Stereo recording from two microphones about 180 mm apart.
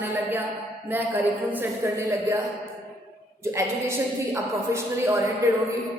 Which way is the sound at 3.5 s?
15° right (ahead or behind).